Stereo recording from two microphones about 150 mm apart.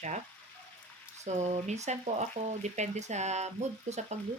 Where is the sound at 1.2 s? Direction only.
50° right (ahead or behind).